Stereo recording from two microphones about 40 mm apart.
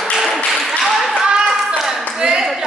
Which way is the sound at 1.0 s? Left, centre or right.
Centre.